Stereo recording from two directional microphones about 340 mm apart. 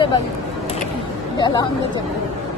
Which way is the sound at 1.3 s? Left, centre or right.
Centre.